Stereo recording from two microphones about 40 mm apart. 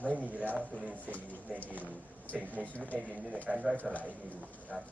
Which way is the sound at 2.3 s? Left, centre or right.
Right.